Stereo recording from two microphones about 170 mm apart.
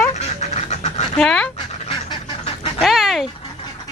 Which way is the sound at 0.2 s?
40° left (ahead or behind).